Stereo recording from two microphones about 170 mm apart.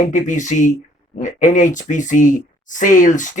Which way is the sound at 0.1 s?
45° left (ahead or behind).